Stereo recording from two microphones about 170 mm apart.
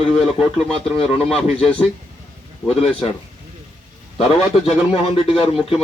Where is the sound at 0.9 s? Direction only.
35° left (ahead or behind).